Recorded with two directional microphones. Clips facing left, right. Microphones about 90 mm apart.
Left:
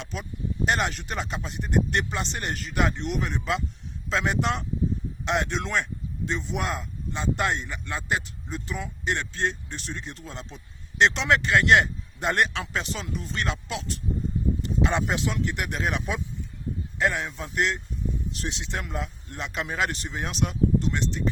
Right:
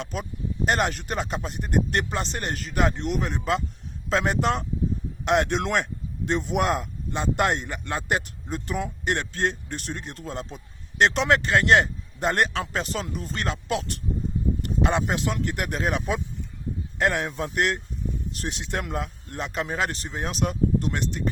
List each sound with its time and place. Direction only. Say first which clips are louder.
0.0 s speech: right 3 dB; 45° right (ahead or behind)
5.2 s speech: right 5 dB; 55° right (ahead or behind)
14.6 s a sound: right 2 dB; 50° right (ahead or behind)
15.1 s speech: right 1 dB; 50° right (ahead or behind)
17.0 s speech: right 2 dB; 55° right (ahead or behind)